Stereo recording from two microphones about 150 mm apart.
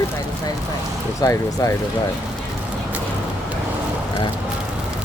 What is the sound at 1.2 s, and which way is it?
Speech, 20° left (ahead or behind).